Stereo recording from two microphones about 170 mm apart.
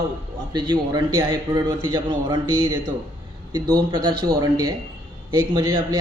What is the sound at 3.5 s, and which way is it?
A man's voice, 25° right (ahead or behind).